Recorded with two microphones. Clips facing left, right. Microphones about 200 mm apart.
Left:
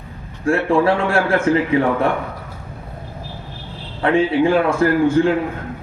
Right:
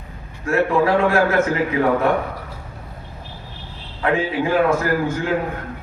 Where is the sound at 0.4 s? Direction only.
30° left (ahead or behind).